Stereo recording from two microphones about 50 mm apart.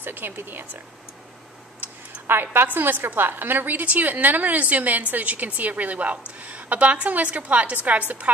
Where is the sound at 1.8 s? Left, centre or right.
Right.